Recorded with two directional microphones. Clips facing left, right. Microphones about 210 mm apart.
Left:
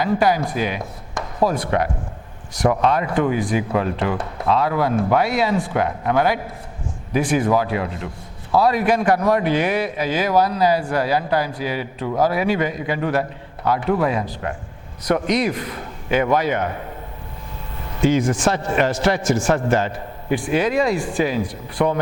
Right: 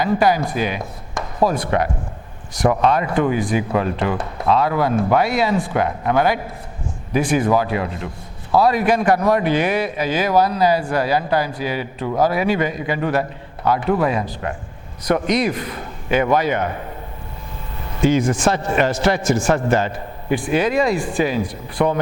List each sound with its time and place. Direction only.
0.0 s speech: 10° right (ahead or behind)
18.0 s speech: 10° right (ahead or behind)